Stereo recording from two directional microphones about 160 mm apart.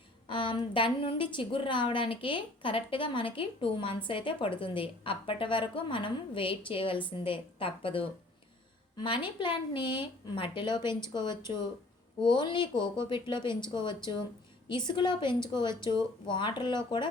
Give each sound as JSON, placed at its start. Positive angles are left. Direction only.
{"t": 0.3, "sound": "a woman's voice", "side_deg": 30}